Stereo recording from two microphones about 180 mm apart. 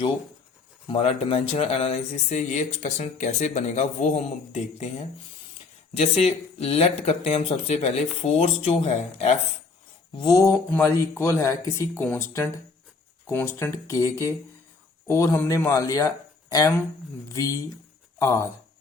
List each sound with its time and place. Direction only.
0.9 s speech: 30° left (ahead or behind)
6.0 s speech: 35° left (ahead or behind)
10.2 s speech: 20° left (ahead or behind)